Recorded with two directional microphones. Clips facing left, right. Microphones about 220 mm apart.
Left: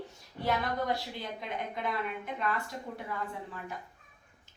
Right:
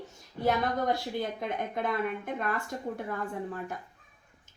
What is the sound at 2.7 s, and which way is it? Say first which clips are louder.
Speech: right 5 dB; 50° right (ahead or behind).